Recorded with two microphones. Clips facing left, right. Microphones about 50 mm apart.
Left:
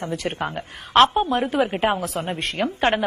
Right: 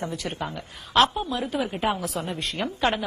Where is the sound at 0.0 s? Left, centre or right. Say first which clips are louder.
Left 4 dB; left.